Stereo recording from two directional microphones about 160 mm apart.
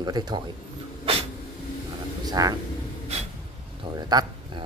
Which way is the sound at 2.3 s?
25° right (ahead or behind).